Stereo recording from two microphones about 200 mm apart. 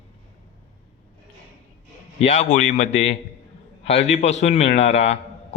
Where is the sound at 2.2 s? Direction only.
35° left (ahead or behind).